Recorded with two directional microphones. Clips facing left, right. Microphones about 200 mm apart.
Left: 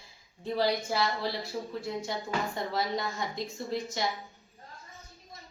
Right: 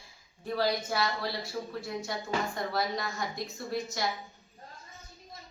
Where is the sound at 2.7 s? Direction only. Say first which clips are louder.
Left 2 dB; 25° left (ahead or behind).